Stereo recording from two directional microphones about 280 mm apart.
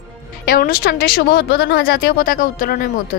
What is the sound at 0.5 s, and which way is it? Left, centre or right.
Speech, left.